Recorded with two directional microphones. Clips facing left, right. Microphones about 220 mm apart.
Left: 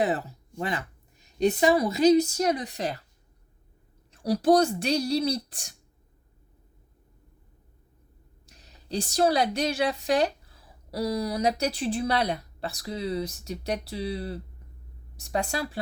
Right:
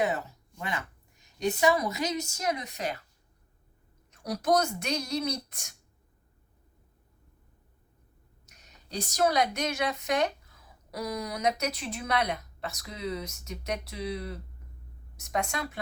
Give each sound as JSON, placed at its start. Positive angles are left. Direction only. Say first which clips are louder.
{"t": 0.0, "sound": "speech", "louder": "left 3 dB", "side_deg": 35}
{"t": 4.1, "sound": "speech", "louder": "left 6 dB", "side_deg": 30}
{"t": 8.4, "sound": "a woman's voice", "louder": "left 12 dB", "side_deg": 30}